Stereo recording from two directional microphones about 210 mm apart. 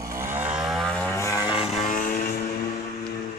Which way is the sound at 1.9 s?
40° left (ahead or behind).